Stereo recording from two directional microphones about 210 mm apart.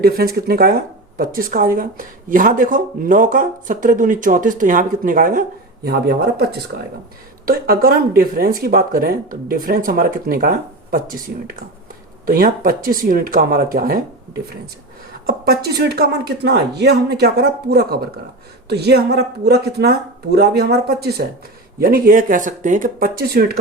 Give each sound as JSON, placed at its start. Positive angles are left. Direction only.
{"t": 0.0, "sound": "speech", "side_deg": -45}
{"t": 12.2, "sound": "speech", "side_deg": -45}
{"t": 15.4, "sound": "speech", "side_deg": -50}